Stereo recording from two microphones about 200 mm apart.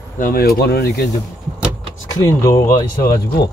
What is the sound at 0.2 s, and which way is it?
Speech, 50° left (ahead or behind).